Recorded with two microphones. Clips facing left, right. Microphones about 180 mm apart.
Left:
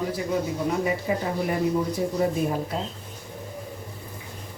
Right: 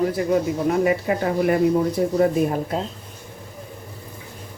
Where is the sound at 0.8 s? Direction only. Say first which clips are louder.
Right 5 dB; 65° right (ahead or behind).